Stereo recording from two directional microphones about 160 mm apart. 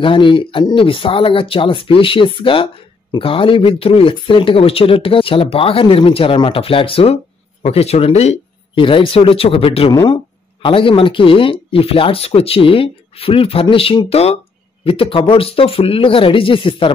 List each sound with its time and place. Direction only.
0.0 s speech: 30° left (ahead or behind)